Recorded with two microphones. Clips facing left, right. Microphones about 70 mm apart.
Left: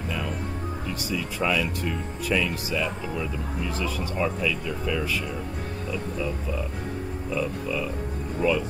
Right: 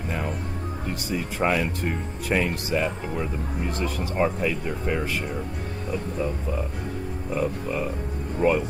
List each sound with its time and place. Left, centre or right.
1.1 s speech: right